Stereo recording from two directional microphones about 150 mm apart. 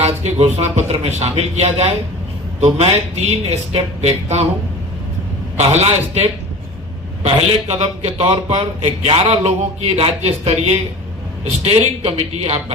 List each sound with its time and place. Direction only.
0.0 s a man's voice: 45° right (ahead or behind)
5.5 s a man's voice: 45° right (ahead or behind)